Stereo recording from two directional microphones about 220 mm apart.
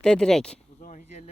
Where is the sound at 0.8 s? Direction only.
30° left (ahead or behind).